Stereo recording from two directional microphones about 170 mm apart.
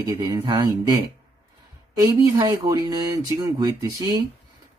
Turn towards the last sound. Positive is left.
turn(degrees=-25)  # may be behind; listen again after turning